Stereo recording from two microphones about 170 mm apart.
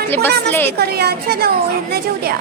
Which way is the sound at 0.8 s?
70° right (ahead or behind).